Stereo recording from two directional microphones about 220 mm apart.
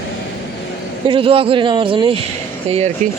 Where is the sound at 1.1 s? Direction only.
25° right (ahead or behind).